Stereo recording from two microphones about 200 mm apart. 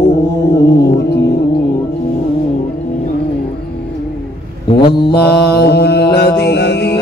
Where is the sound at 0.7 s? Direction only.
55° left (ahead or behind).